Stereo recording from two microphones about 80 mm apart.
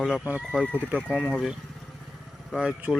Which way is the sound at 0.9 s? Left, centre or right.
Centre.